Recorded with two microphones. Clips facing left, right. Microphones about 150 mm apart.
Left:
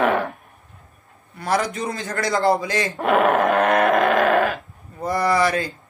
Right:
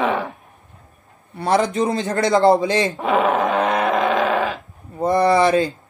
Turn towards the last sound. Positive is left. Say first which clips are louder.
# right 4 dB
turn(degrees=-25)  # may be behind; listen again after turning